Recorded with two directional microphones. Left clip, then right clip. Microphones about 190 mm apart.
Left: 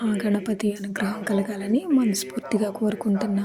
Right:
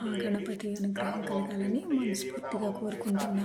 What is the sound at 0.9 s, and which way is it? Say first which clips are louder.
Speech: left 4 dB; 50° left (ahead or behind).